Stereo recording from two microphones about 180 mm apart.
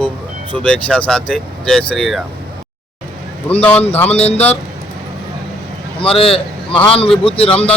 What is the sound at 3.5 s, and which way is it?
Speech, 10° left (ahead or behind).